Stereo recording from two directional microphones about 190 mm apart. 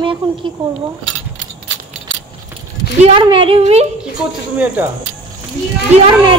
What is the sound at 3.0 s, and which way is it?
Speech, 30° right (ahead or behind).